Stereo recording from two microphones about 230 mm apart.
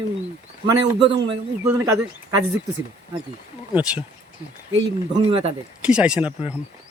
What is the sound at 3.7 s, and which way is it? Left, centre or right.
Speech, centre.